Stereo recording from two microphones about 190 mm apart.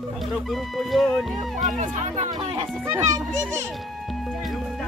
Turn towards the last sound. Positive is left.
turn(degrees=-15)  # may be behind; listen again after turning